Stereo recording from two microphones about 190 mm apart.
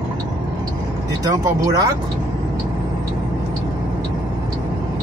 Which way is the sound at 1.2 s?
20° right (ahead or behind).